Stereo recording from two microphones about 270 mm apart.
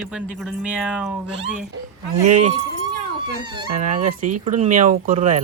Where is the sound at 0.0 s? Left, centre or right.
Centre.